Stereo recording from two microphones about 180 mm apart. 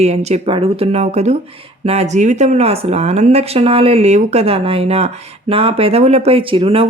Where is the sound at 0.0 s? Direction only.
35° right (ahead or behind).